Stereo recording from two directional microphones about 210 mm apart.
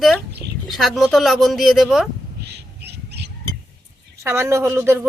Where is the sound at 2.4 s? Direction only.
50° right (ahead or behind).